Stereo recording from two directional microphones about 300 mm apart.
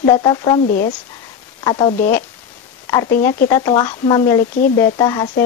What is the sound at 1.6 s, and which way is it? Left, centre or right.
Speech, centre.